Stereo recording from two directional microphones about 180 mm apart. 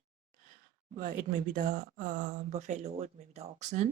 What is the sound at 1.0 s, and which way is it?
Speech, 45° right (ahead or behind).